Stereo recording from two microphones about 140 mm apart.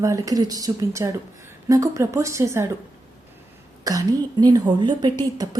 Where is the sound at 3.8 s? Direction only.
25° right (ahead or behind).